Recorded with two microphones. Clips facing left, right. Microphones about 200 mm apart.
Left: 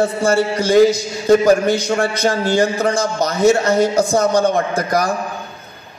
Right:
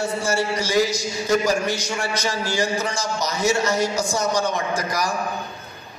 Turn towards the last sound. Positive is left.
turn(degrees=55)  # may be behind; listen again after turning